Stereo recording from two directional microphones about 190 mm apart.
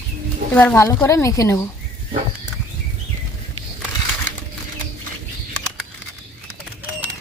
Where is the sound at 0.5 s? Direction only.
10° left (ahead or behind).